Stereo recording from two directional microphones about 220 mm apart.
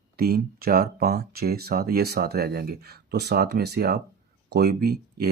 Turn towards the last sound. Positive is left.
turn(degrees=-45)  # may be behind; listen again after turning